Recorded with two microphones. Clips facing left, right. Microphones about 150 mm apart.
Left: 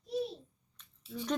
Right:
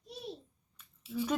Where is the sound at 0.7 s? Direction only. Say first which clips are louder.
Right 6 dB; 10° right (ahead or behind).